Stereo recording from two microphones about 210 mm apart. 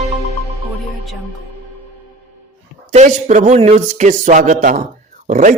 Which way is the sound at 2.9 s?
35° right (ahead or behind).